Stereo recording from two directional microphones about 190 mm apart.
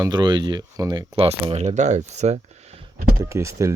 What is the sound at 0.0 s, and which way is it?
Speech, 25° right (ahead or behind).